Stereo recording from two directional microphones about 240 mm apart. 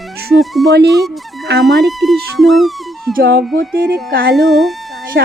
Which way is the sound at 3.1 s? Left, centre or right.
Right.